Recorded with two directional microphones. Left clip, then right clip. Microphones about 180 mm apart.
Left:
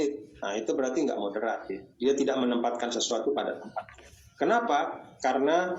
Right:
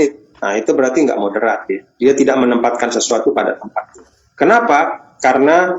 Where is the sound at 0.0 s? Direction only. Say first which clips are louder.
Right 15 dB; 45° right (ahead or behind).